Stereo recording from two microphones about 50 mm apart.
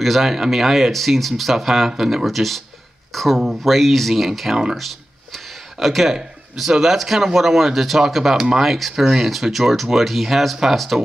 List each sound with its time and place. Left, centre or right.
0.0 s speech: centre
4.7 s a sound: centre
6.5 s speech: centre